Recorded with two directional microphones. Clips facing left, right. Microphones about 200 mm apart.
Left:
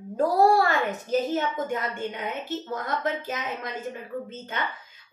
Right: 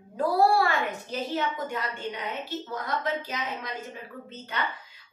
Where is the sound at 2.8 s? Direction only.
50° left (ahead or behind).